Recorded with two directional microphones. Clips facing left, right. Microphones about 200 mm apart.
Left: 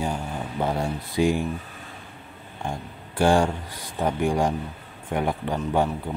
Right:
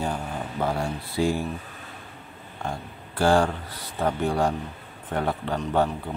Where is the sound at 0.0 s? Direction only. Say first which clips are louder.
Left 1 dB; 15° left (ahead or behind).